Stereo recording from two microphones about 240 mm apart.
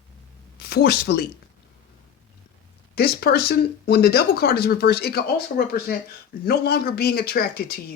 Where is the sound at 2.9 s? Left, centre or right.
Left.